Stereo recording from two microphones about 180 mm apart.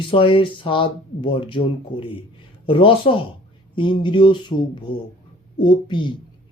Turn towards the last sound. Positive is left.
turn(degrees=25)  # may be behind; listen again after turning